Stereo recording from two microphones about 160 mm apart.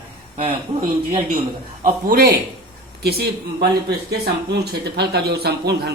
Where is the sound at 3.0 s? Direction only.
85° right.